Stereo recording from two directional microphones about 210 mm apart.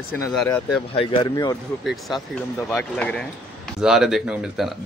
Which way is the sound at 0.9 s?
25° left (ahead or behind).